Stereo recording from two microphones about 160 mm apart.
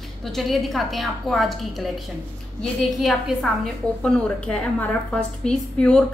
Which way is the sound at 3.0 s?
Centre (ahead or behind).